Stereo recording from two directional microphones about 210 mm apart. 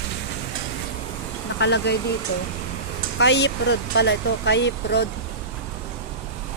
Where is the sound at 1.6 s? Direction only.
55° left (ahead or behind).